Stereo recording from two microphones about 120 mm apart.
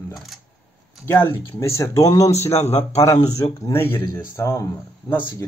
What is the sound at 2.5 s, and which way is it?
Speech, 65° left (ahead or behind).